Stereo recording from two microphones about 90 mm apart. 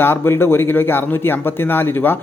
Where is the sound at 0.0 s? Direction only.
25° left (ahead or behind).